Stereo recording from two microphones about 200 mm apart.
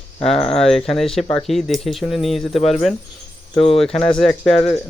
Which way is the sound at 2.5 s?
30° left (ahead or behind).